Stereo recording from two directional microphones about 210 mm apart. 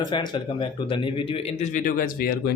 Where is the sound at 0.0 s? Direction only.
20° left (ahead or behind).